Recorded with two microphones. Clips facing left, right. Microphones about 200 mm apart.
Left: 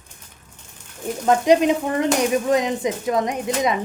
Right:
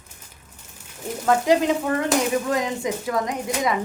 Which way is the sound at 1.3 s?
20° left (ahead or behind).